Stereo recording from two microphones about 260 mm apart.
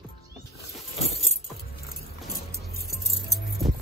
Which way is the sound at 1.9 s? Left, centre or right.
Left.